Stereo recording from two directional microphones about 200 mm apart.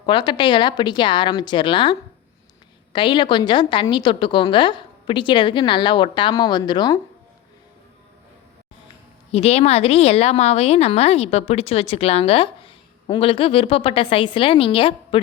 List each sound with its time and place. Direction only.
0.0 s a woman's voice: 25° left (ahead or behind)
9.3 s a woman's voice: 30° left (ahead or behind)